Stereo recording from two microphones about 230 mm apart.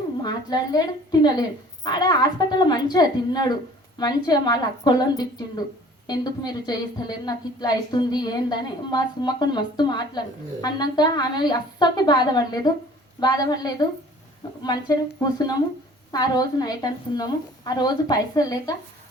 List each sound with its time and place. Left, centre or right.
0.2 s a woman's voice: centre